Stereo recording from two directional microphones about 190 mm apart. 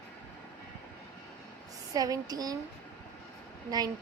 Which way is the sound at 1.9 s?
20° right (ahead or behind).